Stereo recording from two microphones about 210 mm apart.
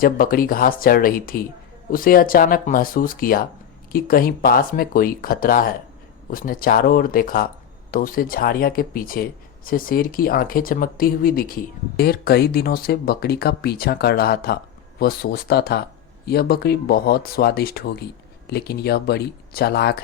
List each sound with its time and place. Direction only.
0.0 s speech: 45° left (ahead or behind)